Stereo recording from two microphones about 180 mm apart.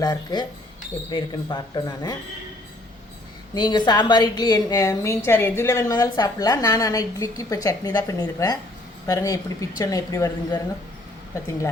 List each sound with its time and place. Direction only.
0.0 s a woman's voice: 20° left (ahead or behind)
3.5 s a woman's voice: 25° left (ahead or behind)